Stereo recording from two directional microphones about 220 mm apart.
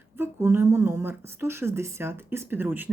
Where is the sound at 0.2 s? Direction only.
10° right (ahead or behind).